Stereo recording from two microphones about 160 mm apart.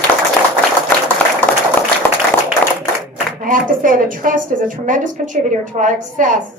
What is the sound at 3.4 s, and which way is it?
A woman's voice, 60° right (ahead or behind).